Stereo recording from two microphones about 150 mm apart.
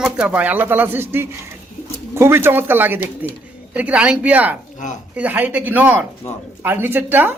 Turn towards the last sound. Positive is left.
turn(degrees=-15)  # may be behind; listen again after turning